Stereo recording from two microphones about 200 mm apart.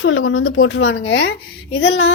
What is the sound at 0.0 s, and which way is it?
A woman's voice, 85° left.